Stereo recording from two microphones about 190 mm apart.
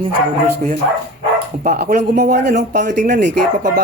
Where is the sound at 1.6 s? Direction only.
45° right (ahead or behind).